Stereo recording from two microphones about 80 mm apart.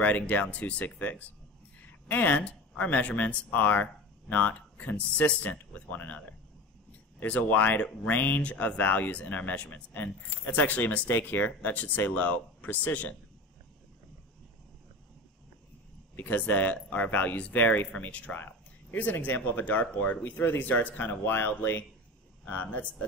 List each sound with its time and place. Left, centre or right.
0.0 s speech: centre
16.2 s speech: left